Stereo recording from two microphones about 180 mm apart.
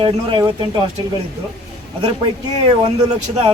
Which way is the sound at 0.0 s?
25° right (ahead or behind).